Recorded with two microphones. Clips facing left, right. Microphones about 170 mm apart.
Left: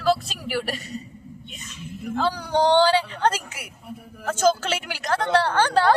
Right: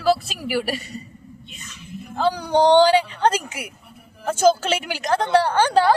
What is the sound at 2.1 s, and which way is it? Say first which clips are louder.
A woman's voice: right 4 dB; 15° right (ahead or behind).